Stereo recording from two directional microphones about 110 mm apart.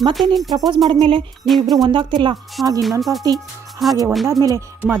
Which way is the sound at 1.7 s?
40° right (ahead or behind).